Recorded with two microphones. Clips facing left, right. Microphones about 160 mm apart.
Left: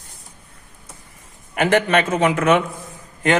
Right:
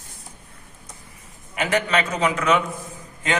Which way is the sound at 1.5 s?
55° left (ahead or behind).